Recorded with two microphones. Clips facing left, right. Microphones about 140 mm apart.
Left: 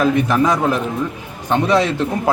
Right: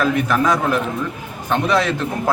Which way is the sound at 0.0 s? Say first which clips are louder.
Left 2 dB; 15° left (ahead or behind).